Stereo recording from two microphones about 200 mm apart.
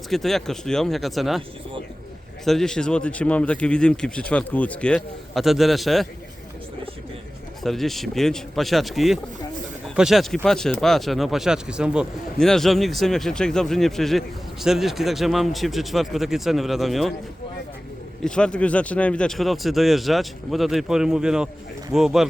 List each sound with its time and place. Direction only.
0.1 s speech: centre (ahead or behind)
2.4 s speech: centre (ahead or behind)
7.6 s speech: centre (ahead or behind)
18.2 s speech: 5° left (ahead or behind)